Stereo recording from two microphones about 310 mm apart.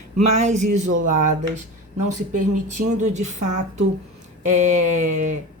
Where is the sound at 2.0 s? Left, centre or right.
Right.